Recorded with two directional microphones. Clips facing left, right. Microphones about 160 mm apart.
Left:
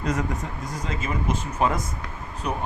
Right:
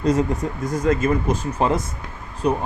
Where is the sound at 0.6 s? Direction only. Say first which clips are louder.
Right 11 dB; 50° right (ahead or behind).